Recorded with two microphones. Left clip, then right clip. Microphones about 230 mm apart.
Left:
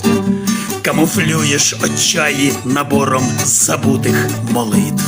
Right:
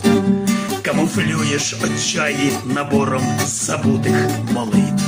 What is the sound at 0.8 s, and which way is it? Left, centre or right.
Music, left.